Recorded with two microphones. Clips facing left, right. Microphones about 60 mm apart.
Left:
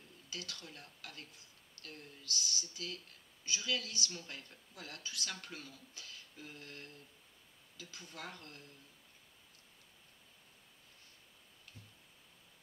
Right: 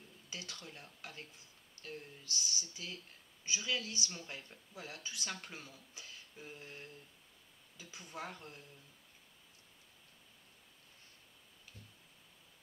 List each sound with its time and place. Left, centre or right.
0.3 s a woman's voice: right